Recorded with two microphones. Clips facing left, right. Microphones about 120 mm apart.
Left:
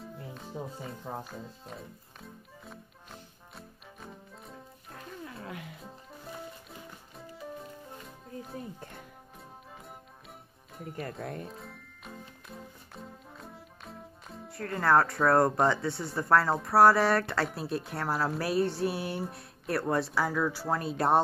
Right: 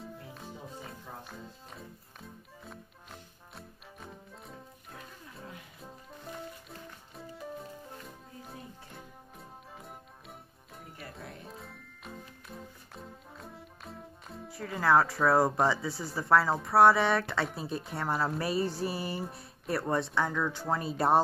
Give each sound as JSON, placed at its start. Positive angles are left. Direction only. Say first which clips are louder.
{"t": 0.0, "sound": "music", "louder": "left 1 dB", "side_deg": 0}
{"t": 5.2, "sound": "music", "louder": "left 6 dB", "side_deg": 90}
{"t": 5.8, "sound": "music", "louder": "left 1 dB", "side_deg": 0}
{"t": 11.0, "sound": "speech", "louder": "left 9 dB", "side_deg": 45}
{"t": 11.4, "sound": "music", "louder": "left 2 dB", "side_deg": 0}